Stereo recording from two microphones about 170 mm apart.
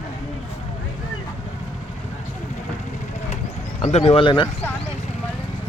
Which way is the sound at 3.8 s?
40° left (ahead or behind).